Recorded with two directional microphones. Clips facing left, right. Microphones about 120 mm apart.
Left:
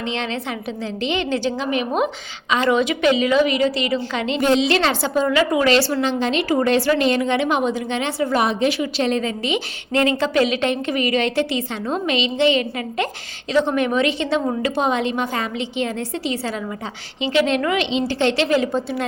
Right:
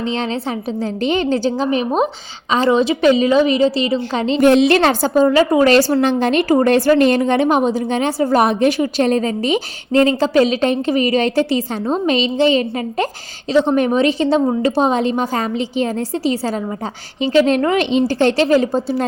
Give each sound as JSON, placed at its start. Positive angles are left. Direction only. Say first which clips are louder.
{"t": 0.0, "sound": "a woman's voice", "louder": "right 5 dB", "side_deg": -35}
{"t": 4.4, "sound": "a woman's voice", "louder": "right 6 dB", "side_deg": -55}